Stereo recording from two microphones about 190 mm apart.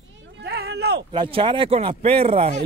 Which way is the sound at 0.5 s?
60° right (ahead or behind).